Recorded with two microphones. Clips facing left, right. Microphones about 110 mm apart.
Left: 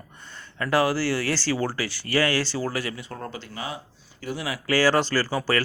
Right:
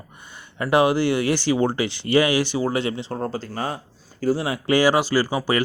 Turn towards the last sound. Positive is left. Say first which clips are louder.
# right 3 dB
turn(degrees=-15)  # may be behind; listen again after turning